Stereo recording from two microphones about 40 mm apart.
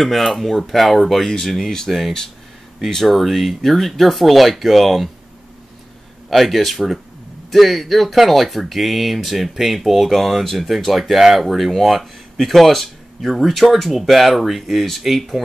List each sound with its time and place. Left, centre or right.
0.0 s speech: centre
6.3 s speech: centre